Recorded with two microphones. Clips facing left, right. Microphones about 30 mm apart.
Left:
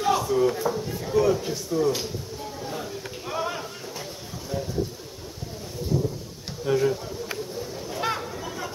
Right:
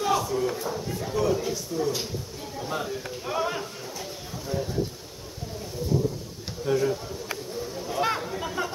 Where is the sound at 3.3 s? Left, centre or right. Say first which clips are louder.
Right 1 dB; centre.